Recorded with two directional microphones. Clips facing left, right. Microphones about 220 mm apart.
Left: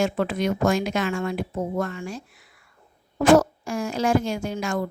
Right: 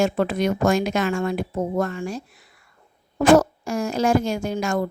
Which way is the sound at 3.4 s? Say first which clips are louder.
Right 2 dB; 40° right (ahead or behind).